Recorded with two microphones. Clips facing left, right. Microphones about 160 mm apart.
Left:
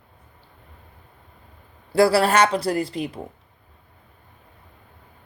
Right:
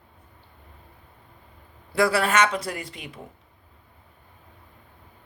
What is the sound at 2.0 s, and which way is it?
A woman's voice, 35° left (ahead or behind).